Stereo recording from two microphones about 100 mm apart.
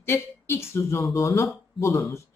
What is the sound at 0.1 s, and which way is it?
A woman's voice, 25° left (ahead or behind).